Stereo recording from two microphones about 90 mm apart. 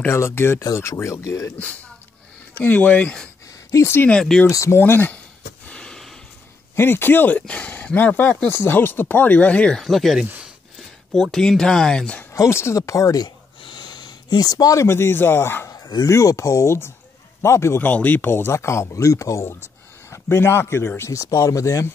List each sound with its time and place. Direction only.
0.0 s speech: 25° left (ahead or behind)
1.6 s speech: 15° left (ahead or behind)
4.1 s speech: 10° left (ahead or behind)
4.5 s speech: 40° left (ahead or behind)
4.7 s speech: 25° left (ahead or behind)
5.7 s a sound: 10° left (ahead or behind)
6.7 s speech: 25° left (ahead or behind)
9.8 s speech: centre (ahead or behind)
11.3 s speech: 5° left (ahead or behind)
12.3 s speech: 30° left (ahead or behind)
13.6 s speech: 60° left (ahead or behind); by 15.7 s 25° left (ahead or behind)
15.7 s speech: 45° left (ahead or behind)